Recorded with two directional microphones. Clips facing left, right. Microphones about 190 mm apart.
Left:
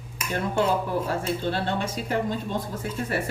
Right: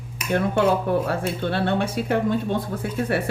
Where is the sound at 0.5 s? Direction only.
60° right (ahead or behind).